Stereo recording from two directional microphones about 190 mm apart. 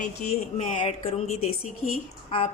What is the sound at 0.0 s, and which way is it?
A woman's voice, 35° left (ahead or behind).